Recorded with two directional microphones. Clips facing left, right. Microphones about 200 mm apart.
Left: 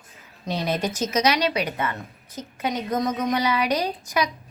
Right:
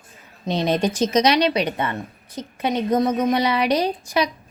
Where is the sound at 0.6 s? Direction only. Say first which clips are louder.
Right 5 dB; 30° right (ahead or behind).